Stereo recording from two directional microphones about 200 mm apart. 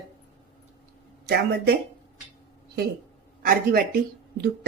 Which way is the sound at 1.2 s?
50° right (ahead or behind).